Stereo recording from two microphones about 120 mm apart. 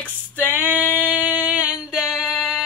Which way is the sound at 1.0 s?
10° right (ahead or behind).